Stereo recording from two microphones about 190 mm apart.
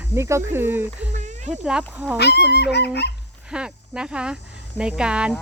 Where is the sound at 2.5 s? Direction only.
60° left (ahead or behind).